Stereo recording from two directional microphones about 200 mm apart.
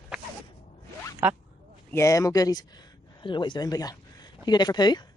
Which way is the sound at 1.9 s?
15° left (ahead or behind).